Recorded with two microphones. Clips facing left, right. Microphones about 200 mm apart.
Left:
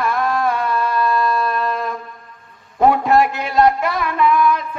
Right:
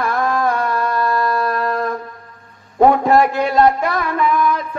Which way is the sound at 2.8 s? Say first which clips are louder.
Right 2 dB; 25° right (ahead or behind).